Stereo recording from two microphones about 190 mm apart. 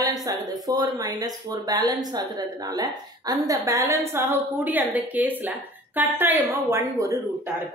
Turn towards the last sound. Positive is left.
turn(degrees=-15)  # may be behind; listen again after turning